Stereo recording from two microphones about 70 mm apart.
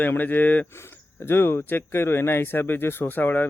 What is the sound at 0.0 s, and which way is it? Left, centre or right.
Speech, left.